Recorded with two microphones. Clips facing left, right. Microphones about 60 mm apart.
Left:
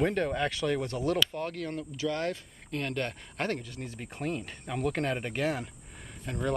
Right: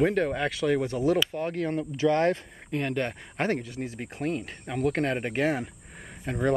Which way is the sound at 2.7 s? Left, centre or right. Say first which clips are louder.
Right 4 dB; centre.